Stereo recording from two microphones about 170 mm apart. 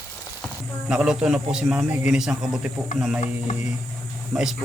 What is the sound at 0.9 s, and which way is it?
A man's voice, 5° right (ahead or behind).